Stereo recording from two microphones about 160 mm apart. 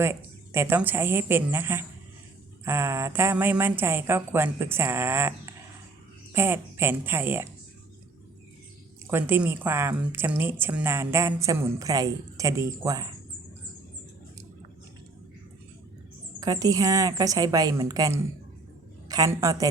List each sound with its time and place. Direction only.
0.0 s a woman's voice: 15° right (ahead or behind)
9.0 s a woman's voice: 15° right (ahead or behind)
16.4 s a woman's voice: 20° right (ahead or behind)